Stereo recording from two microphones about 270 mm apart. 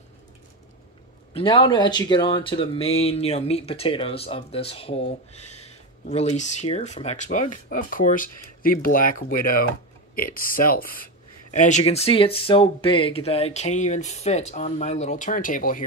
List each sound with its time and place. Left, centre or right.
1.3 s speech: centre
6.0 s speech: left